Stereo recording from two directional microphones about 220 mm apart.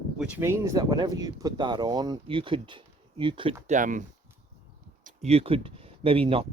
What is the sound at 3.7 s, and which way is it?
Speech, 35° right (ahead or behind).